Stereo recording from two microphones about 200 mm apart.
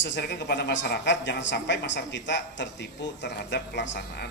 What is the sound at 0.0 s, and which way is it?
Speech, 60° left (ahead or behind).